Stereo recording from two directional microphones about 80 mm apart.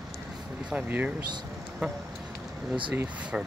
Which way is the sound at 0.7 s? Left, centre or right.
Centre.